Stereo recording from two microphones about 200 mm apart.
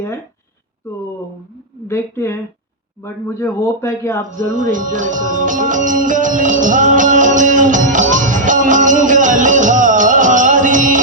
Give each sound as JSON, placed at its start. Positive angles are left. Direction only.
{"t": 1.9, "sound": "a man's voice", "side_deg": 10}
{"t": 4.4, "sound": "music", "side_deg": -40}